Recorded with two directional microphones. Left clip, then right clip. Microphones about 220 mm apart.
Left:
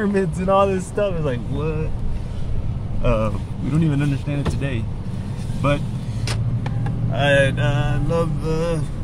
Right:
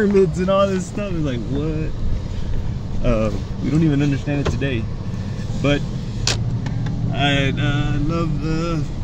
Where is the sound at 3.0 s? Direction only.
25° left (ahead or behind).